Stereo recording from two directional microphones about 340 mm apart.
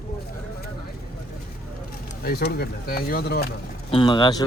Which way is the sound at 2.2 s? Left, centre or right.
Left.